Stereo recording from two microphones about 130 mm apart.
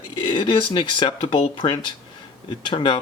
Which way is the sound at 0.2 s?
40° left (ahead or behind).